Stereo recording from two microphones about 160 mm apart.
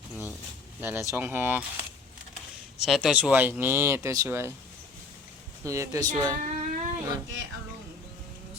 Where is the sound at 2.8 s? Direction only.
5° right (ahead or behind).